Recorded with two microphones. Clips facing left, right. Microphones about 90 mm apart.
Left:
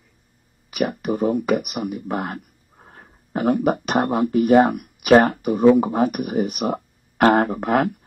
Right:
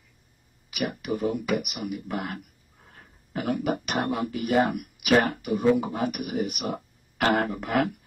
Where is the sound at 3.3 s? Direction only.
40° left (ahead or behind).